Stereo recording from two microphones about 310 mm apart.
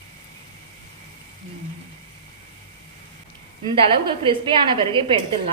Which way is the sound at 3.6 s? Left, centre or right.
Centre.